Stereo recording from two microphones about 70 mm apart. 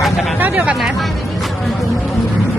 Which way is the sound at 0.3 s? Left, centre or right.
Right.